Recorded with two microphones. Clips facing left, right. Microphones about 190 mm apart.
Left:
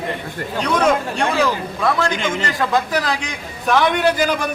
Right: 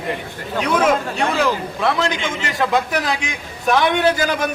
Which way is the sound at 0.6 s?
5° right (ahead or behind).